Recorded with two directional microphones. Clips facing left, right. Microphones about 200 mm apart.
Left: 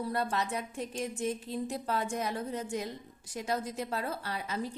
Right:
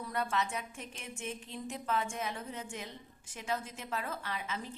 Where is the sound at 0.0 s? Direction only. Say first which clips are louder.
Left 3 dB; 35° left (ahead or behind).